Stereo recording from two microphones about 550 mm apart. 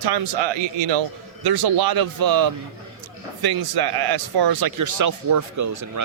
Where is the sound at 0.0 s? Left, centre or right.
Right.